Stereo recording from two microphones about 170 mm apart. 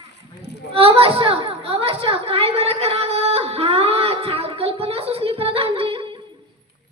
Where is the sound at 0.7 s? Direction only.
35° right (ahead or behind).